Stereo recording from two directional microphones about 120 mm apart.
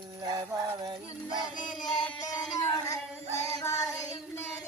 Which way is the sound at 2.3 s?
35° left (ahead or behind).